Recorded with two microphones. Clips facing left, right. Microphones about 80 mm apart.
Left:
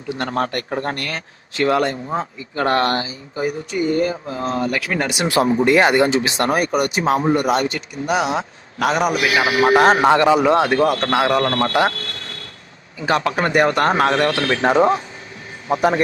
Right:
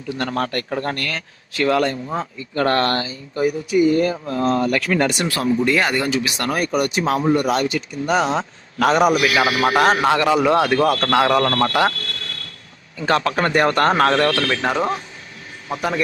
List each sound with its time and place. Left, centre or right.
0.2 s speech: left
3.3 s speech: centre
4.7 s speech: centre
5.2 s speech: left
6.6 s speech: centre
7.0 s speech: left
7.5 s a man's voice: centre
9.1 s speech: left
13.0 s speech: centre; by 16.0 s left